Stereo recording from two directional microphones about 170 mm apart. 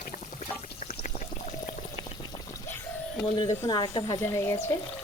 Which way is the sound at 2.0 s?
25° left (ahead or behind).